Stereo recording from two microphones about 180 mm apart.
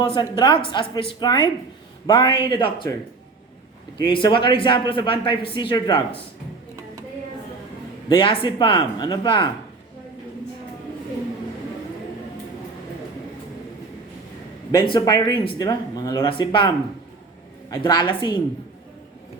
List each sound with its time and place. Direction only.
0.0 s a man's voice: 25° left (ahead or behind)
4.0 s a man's voice: 25° left (ahead or behind)
8.1 s a man's voice: 30° left (ahead or behind)
14.9 s a man's voice: 25° left (ahead or behind)